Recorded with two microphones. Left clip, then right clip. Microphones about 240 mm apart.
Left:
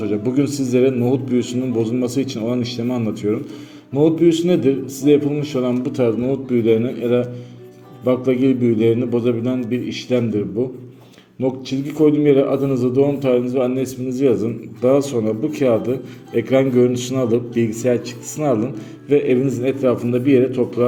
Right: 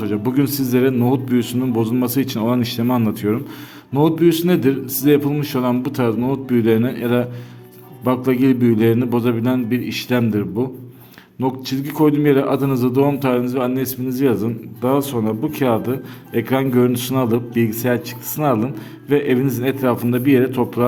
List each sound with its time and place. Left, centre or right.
0.0 s a man's voice: right
11.4 s a man's voice: right